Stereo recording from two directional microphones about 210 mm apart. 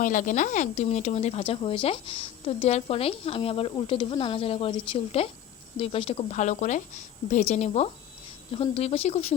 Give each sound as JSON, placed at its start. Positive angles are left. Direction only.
{"t": 0.0, "sound": "speech", "side_deg": 35}